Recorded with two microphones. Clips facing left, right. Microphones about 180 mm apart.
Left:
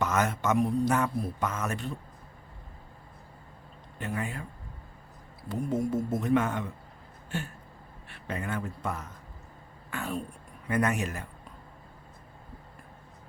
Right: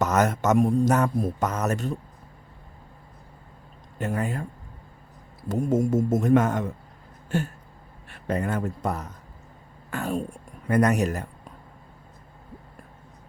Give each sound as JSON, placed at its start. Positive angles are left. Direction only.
{"t": 0.0, "sound": "speech", "side_deg": -40}
{"t": 3.9, "sound": "speech", "side_deg": -45}
{"t": 5.5, "sound": "speech", "side_deg": -45}
{"t": 7.3, "sound": "a sound", "side_deg": -45}
{"t": 8.1, "sound": "speech", "side_deg": -40}